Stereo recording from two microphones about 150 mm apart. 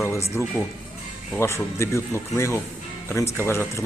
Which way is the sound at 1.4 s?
20° left (ahead or behind).